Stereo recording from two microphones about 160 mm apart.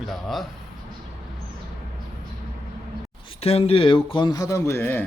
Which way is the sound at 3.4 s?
40° left (ahead or behind).